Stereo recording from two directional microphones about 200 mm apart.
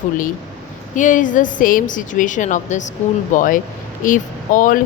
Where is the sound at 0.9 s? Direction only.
40° left (ahead or behind).